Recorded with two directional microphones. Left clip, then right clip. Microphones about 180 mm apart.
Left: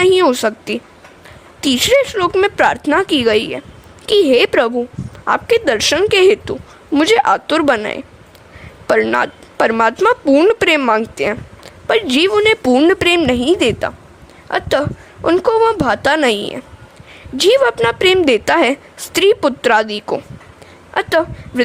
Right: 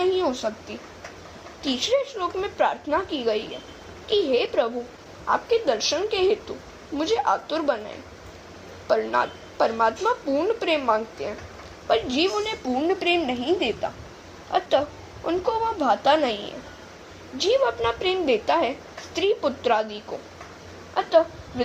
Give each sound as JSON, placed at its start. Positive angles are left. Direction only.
{"t": 0.0, "sound": "a woman's voice", "side_deg": 60}